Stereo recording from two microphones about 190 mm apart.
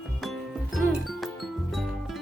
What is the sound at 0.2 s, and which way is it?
Music, centre (ahead or behind).